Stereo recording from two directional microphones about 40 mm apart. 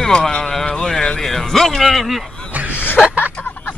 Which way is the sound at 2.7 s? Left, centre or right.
Left.